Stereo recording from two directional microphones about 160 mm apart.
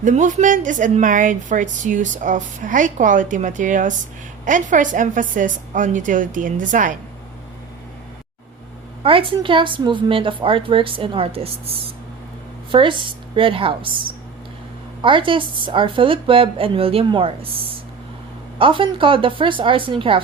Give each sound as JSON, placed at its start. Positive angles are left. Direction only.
{"t": 0.0, "sound": "a woman's voice", "side_deg": -50}
{"t": 9.0, "sound": "a woman's voice", "side_deg": -35}
{"t": 15.0, "sound": "a woman's voice", "side_deg": -30}
{"t": 18.6, "sound": "a woman's voice", "side_deg": -30}